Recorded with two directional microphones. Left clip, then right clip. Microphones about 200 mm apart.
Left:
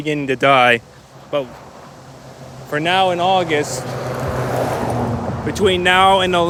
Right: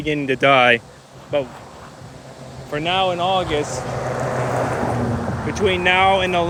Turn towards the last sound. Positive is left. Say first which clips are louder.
# left 3 dB
turn(degrees=30)  # may be behind; listen again after turning